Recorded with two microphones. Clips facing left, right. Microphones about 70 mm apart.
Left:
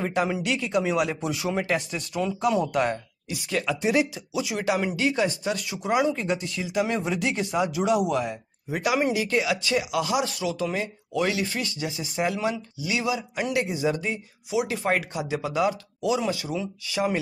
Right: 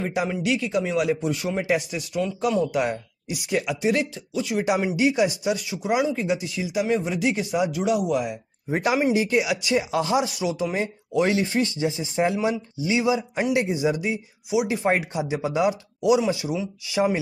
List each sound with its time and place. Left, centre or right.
0.0 s speech: centre
2.2 s speech: centre
2.7 s speech: centre
3.3 s speech: centre
3.8 s speech: centre
4.8 s speech: centre
8.6 s speech: right
9.1 s a man's voice: right
9.8 s a man's voice: right
10.2 s a man's voice: centre